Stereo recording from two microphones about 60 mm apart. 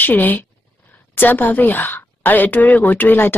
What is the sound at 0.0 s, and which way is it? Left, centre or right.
Speech, left.